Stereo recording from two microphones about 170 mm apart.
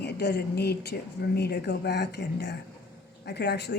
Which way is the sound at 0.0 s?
75° left (ahead or behind).